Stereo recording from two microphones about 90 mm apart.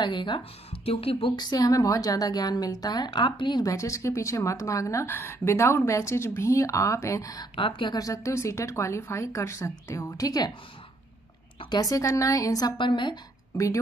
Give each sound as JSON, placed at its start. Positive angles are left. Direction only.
{"t": 0.0, "sound": "a woman's voice", "side_deg": 60}
{"t": 0.8, "sound": "a woman's voice", "side_deg": 90}
{"t": 1.3, "sound": "a woman's voice", "side_deg": 50}
{"t": 3.6, "sound": "speech", "side_deg": 35}
{"t": 7.5, "sound": "a woman's voice", "side_deg": 70}
{"t": 7.9, "sound": "speech", "side_deg": 40}
{"t": 11.7, "sound": "speech", "side_deg": 40}
{"t": 12.7, "sound": "a woman's voice", "side_deg": 65}
{"t": 13.5, "sound": "speech", "side_deg": 40}